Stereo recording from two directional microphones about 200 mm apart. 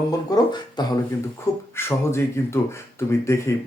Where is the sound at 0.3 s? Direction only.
20° left (ahead or behind).